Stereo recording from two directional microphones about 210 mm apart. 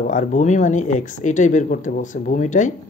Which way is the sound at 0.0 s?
35° left (ahead or behind).